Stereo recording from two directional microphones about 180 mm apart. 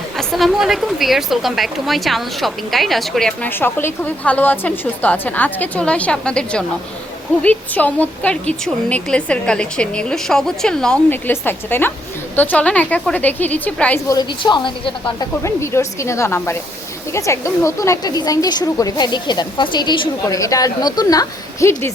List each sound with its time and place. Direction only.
0.2 s a woman's voice: centre (ahead or behind)
14.1 s a woman's voice: 25° left (ahead or behind)
15.4 s a woman's voice: 15° left (ahead or behind)